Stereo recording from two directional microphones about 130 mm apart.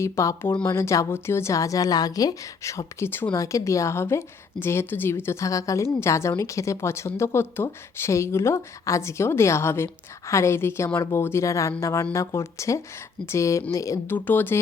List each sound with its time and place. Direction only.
0.0 s a woman's voice: 25° left (ahead or behind)